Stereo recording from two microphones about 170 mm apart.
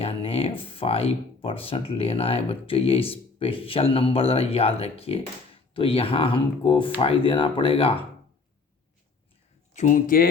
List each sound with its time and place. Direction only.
0.0 s speech: 35° left (ahead or behind)
9.7 s speech: 50° left (ahead or behind)